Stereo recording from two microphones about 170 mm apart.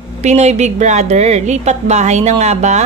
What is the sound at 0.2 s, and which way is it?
A woman's voice, 40° right (ahead or behind).